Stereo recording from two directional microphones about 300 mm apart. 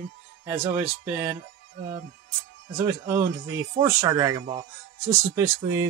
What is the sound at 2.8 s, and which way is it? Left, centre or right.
Speech, centre.